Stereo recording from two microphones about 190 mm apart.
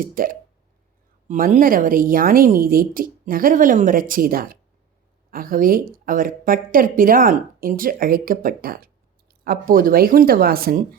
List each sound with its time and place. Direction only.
0.0 s speech: 45° right (ahead or behind)